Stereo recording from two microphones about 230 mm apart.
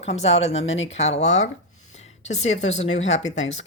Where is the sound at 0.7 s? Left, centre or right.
Left.